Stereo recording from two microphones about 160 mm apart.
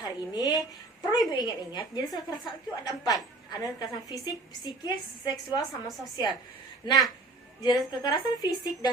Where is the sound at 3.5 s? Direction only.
25° left (ahead or behind).